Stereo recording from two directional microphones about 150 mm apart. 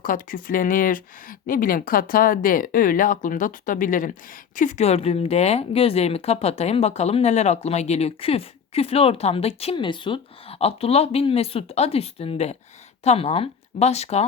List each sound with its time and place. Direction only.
0.0 s speech: 65° left (ahead or behind); by 14.3 s 45° left (ahead or behind)